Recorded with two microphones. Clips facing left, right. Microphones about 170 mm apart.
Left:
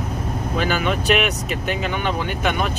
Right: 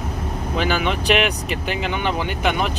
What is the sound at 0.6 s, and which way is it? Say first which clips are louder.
Speech: right 1 dB; 20° right (ahead or behind).